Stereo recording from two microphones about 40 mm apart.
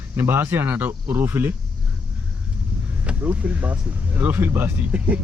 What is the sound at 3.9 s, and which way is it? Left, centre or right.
Speech, right.